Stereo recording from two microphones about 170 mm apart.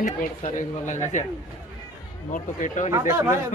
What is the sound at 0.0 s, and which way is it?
A man's voice, 45° left (ahead or behind).